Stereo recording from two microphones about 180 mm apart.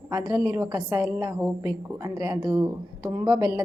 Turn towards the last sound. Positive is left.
turn(degrees=-20)  # may be behind; listen again after turning